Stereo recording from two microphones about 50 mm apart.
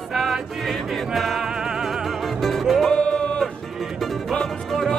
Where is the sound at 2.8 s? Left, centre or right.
Centre.